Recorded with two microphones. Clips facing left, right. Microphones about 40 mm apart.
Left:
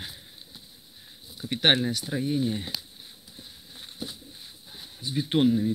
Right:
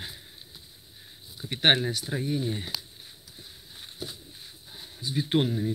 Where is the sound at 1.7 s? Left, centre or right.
Centre.